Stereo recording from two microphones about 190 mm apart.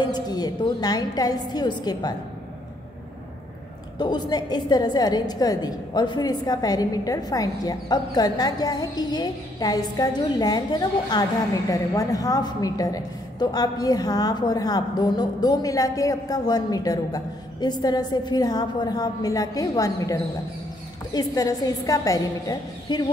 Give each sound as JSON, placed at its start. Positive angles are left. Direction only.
{"t": 0.0, "sound": "a woman's voice", "side_deg": 20}
{"t": 4.0, "sound": "a woman's voice", "side_deg": 20}